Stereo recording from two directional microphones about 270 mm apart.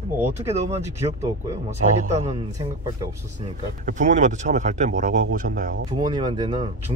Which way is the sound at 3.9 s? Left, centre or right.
Right.